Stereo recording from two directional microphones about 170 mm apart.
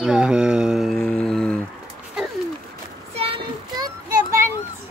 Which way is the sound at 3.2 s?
25° right (ahead or behind).